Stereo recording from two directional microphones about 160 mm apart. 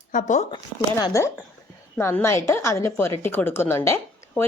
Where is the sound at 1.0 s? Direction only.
20° left (ahead or behind).